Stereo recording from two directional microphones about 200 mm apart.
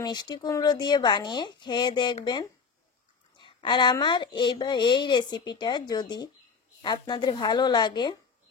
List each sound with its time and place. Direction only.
0.0 s speech: 20° left (ahead or behind)
3.3 s speech: 25° left (ahead or behind)